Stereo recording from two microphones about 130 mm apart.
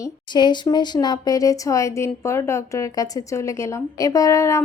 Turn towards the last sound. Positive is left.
turn(degrees=25)  # may be behind; listen again after turning